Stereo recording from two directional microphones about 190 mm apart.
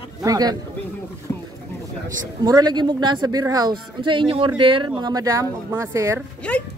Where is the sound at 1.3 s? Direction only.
10° left (ahead or behind).